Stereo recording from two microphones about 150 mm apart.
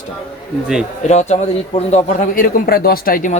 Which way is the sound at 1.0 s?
50° left (ahead or behind).